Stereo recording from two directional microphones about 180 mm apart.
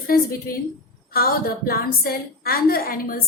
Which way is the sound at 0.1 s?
55° left (ahead or behind).